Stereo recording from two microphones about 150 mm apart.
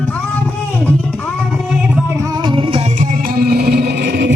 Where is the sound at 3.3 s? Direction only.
90° right.